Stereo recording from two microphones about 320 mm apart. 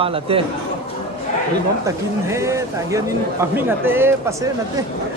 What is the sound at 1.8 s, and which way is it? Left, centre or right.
Speech, centre.